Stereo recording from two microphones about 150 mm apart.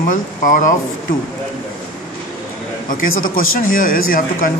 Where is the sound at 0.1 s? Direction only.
60° left (ahead or behind).